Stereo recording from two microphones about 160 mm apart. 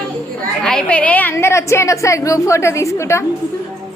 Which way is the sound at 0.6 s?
5° left (ahead or behind).